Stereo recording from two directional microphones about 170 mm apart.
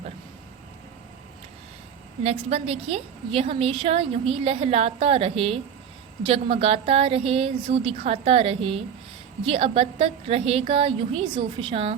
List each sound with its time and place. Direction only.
2.2 s a woman's voice: 35° right (ahead or behind)